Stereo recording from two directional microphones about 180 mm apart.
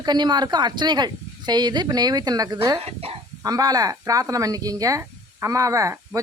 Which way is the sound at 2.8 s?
35° right (ahead or behind).